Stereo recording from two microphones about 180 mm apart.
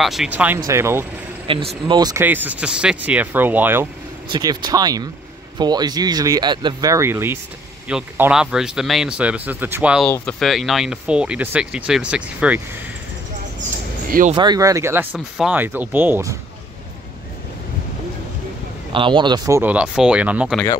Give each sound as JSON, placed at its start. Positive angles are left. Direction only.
{"t": 0.0, "sound": "speech", "side_deg": 0}
{"t": 1.5, "sound": "speech", "side_deg": -30}
{"t": 2.2, "sound": "speech", "side_deg": -10}
{"t": 4.3, "sound": "speech", "side_deg": -20}
{"t": 10.0, "sound": "speech", "side_deg": 5}
{"t": 14.3, "sound": "speech", "side_deg": -25}
{"t": 15.1, "sound": "speech", "side_deg": -5}
{"t": 18.9, "sound": "speech", "side_deg": -25}